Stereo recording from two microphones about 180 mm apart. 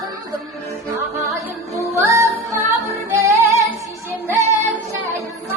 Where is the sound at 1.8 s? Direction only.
15° right (ahead or behind).